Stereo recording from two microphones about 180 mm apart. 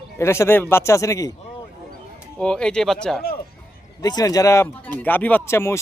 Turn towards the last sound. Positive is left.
turn(degrees=15)  # may be behind; listen again after turning